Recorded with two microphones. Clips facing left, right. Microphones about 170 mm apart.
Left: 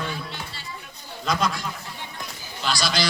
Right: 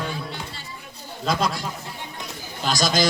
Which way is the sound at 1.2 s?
30° right (ahead or behind).